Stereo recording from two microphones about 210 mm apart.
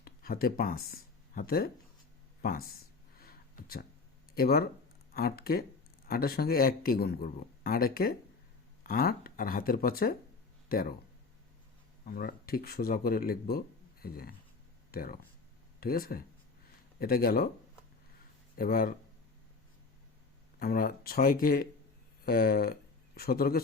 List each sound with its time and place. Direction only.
0.0 s speech: 45° left (ahead or behind)
3.2 s a sound: 45° left (ahead or behind)
4.4 s speech: 45° left (ahead or behind)
12.0 s speech: 45° left (ahead or behind)
18.5 s speech: 45° left (ahead or behind)
20.6 s speech: 45° left (ahead or behind)